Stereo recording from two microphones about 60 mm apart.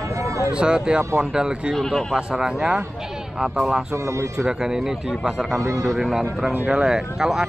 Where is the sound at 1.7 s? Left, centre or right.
Centre.